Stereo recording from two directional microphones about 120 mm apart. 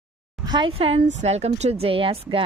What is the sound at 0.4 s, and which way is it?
Speech, 40° right (ahead or behind).